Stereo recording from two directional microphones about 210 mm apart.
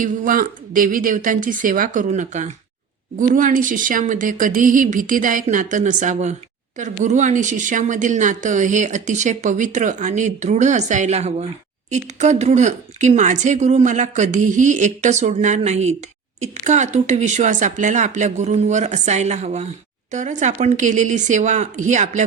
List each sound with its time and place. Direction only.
0.0 s speech: 40° right (ahead or behind)